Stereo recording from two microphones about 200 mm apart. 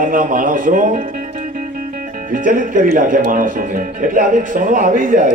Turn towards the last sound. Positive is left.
turn(degrees=-40)  # may be behind; listen again after turning